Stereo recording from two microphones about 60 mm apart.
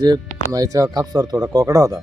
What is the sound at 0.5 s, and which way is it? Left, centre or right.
Speech, right.